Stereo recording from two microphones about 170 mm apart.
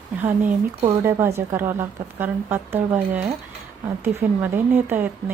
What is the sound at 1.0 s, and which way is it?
A woman's voice, 15° right (ahead or behind).